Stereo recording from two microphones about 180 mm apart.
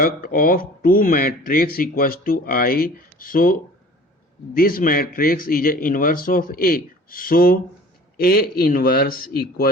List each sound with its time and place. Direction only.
0.0 s a man's voice: 50° left (ahead or behind)